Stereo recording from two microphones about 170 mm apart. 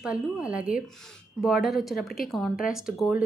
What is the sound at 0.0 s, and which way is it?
A woman's voice, 5° right (ahead or behind).